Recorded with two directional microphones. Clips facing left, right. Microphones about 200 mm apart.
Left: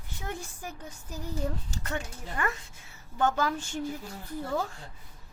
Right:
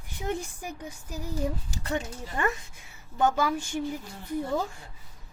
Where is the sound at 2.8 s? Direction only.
10° right (ahead or behind).